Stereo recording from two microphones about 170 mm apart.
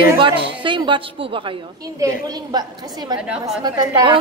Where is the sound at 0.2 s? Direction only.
30° right (ahead or behind).